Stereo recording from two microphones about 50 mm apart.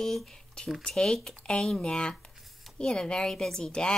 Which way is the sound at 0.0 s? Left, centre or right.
Centre.